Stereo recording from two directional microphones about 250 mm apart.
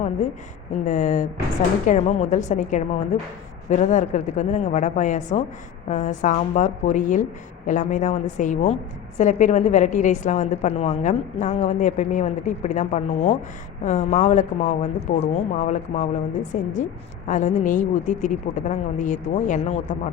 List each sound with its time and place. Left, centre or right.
0.9 s a woman's voice: left